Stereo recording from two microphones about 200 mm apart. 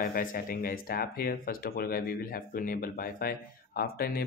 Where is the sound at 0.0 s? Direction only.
45° left (ahead or behind).